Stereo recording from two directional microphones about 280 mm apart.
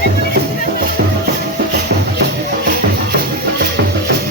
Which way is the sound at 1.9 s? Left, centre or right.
Right.